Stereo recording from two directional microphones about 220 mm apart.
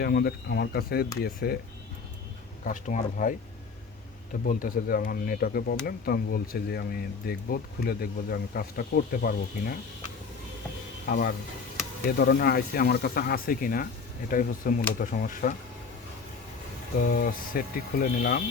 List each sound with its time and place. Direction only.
0.0 s speech: 45° left (ahead or behind)
2.6 s speech: 35° left (ahead or behind)
11.1 s speech: 45° left (ahead or behind)
17.0 s speech: 40° left (ahead or behind)